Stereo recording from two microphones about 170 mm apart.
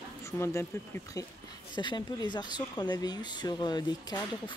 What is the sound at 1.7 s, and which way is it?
Speech, 25° left (ahead or behind).